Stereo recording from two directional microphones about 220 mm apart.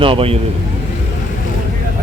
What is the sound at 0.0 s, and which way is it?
Speech, 25° right (ahead or behind).